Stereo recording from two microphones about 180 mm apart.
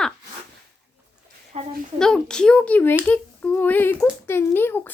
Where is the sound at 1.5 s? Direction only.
35° right (ahead or behind).